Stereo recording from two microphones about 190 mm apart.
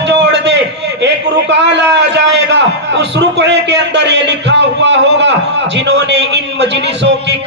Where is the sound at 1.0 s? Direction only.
65° right (ahead or behind).